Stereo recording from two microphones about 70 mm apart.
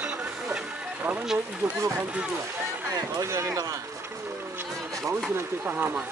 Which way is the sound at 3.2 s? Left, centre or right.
Right.